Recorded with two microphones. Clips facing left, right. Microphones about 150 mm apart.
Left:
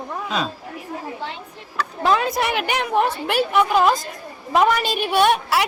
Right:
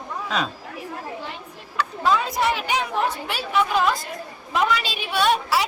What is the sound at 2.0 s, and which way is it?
Speech, 65° left (ahead or behind).